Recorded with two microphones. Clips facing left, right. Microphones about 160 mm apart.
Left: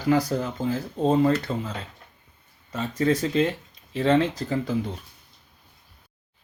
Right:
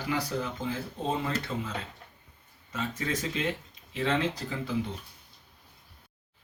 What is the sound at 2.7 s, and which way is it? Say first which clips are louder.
Speech: left 9 dB; 35° left (ahead or behind).